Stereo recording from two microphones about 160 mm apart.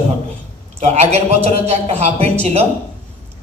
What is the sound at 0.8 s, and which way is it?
A man's voice, 45° right (ahead or behind).